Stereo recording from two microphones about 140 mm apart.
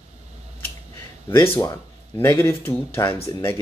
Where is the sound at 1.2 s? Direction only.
15° left (ahead or behind).